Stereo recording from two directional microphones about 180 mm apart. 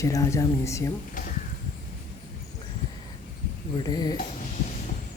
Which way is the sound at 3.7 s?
20° left (ahead or behind).